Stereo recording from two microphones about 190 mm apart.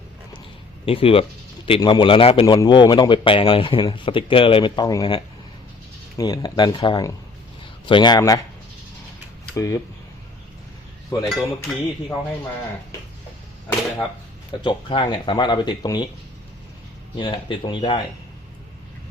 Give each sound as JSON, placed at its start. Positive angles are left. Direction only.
{"t": 0.9, "sound": "speech", "side_deg": 30}
{"t": 9.6, "sound": "speech", "side_deg": 15}
{"t": 11.3, "sound": "cutlery", "side_deg": 0}
{"t": 14.6, "sound": "speech", "side_deg": 25}
{"t": 17.2, "sound": "speech", "side_deg": 25}